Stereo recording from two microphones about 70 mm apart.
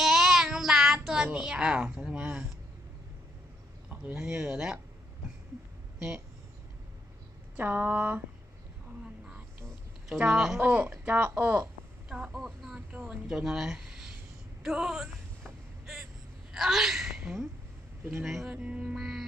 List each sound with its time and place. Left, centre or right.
0.0 s child singing: centre
3.8 s speech: centre
7.5 s speech: right
10.1 s music: centre
10.6 s speech: right
12.0 s a sound: centre
12.9 s a sound: right
13.2 s speech: centre
16.5 s speech: centre
18.5 s music: centre
18.9 s speech: centre